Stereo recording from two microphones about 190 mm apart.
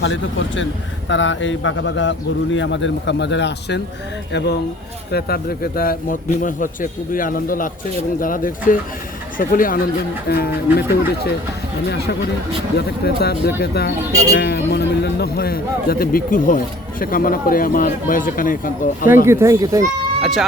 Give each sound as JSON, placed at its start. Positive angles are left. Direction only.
{"t": 0.0, "sound": "a man's voice", "side_deg": 75}
{"t": 5.1, "sound": "a man's voice", "side_deg": 55}
{"t": 12.7, "sound": "a man's voice", "side_deg": 60}
{"t": 19.2, "sound": "speech", "side_deg": -15}